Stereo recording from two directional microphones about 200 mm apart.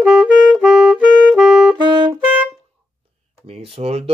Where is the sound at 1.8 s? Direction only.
20° right (ahead or behind).